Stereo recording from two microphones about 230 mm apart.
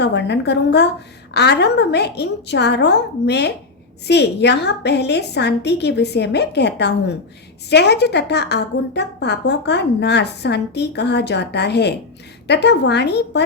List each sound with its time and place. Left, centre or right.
0.0 s a woman's voice: left